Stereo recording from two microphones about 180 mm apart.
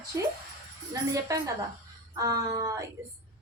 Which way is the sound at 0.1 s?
15° right (ahead or behind).